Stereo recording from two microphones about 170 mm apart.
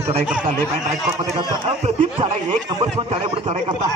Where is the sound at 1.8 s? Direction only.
30° right (ahead or behind).